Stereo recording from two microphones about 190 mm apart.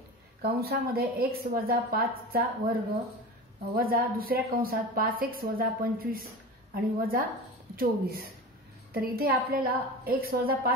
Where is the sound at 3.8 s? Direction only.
50° right (ahead or behind).